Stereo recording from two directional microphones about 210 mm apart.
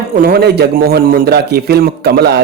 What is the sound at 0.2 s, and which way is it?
A man's voice, 45° right (ahead or behind).